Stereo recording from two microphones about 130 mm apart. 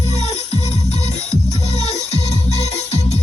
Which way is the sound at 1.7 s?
55° left (ahead or behind).